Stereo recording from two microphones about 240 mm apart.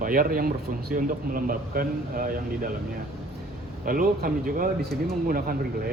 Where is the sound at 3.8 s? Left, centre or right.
Right.